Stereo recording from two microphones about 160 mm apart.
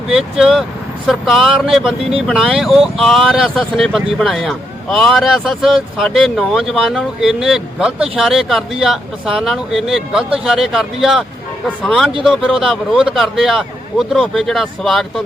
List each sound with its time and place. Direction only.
0.1 s speech: centre (ahead or behind)